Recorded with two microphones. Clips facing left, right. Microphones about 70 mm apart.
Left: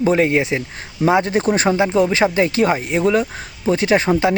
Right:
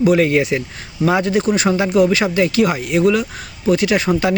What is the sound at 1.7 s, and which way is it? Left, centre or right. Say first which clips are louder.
Speech: right 1 dB; left.